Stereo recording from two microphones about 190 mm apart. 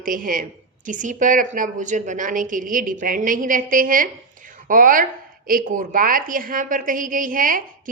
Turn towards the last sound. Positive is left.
turn(degrees=-45)  # may be behind; listen again after turning